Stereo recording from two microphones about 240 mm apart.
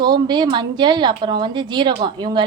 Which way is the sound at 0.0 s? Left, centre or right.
Centre.